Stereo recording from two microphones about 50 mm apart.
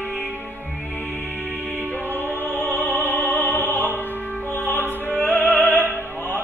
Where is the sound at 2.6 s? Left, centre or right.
Left.